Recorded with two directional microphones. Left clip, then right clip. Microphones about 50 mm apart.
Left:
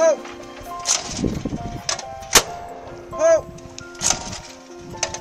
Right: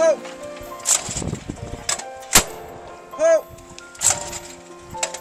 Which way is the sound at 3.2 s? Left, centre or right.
Centre.